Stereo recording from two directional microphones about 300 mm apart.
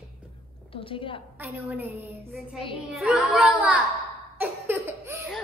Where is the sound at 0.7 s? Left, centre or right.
Centre.